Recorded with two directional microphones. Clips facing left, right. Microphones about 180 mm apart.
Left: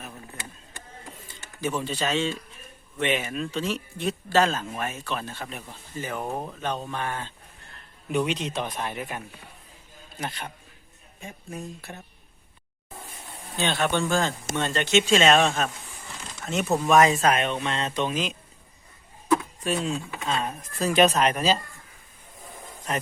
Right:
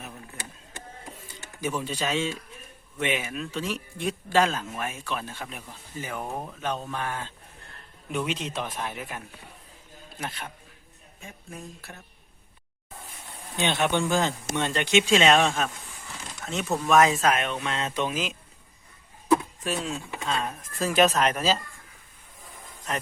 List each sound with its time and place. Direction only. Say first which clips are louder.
1.6 s speech: left 2 dB; 10° right (ahead or behind)
6.2 s speech: left 3 dB; 10° left (ahead or behind)
6.6 s speech: left 1 dB; 5° right (ahead or behind)
13.6 s speech: even; 20° right (ahead or behind)
16.5 s speech: left 2 dB; 5° left (ahead or behind)
19.6 s speech: left 3 dB; centre (ahead or behind)